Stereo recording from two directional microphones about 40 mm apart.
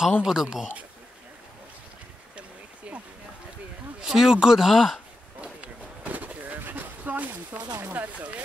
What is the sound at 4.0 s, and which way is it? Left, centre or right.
Speech, centre.